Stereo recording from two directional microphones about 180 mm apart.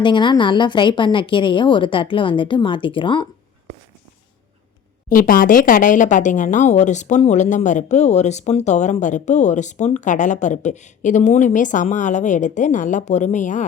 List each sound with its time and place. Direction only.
0.0 s speech: 25° left (ahead or behind)
5.0 s speech: 50° left (ahead or behind)